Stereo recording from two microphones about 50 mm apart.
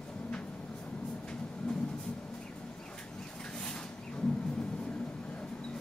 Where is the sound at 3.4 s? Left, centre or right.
Centre.